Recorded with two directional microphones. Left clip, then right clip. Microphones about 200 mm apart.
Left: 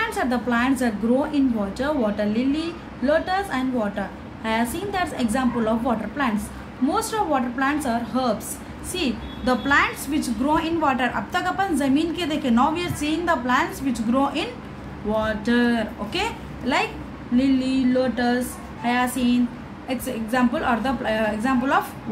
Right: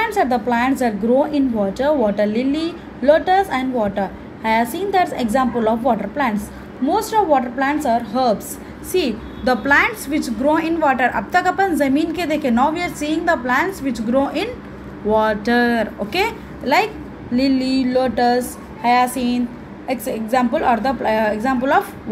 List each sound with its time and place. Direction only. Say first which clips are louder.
0.0 s a woman's voice: right 6 dB; 20° right (ahead or behind)